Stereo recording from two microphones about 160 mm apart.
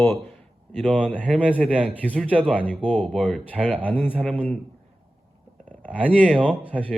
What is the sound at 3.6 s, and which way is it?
Speech, 10° left (ahead or behind).